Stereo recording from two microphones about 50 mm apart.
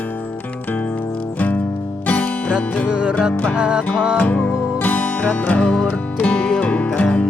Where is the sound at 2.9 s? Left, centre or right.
Centre.